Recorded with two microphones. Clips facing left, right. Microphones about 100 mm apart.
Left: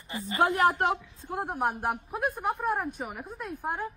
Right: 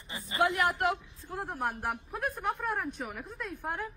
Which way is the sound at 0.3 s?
30° left (ahead or behind).